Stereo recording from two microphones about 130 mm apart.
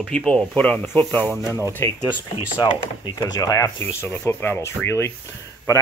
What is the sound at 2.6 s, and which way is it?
Speech, 35° left (ahead or behind).